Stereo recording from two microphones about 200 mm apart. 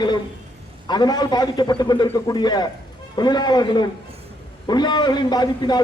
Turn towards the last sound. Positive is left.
turn(degrees=20)  # may be behind; listen again after turning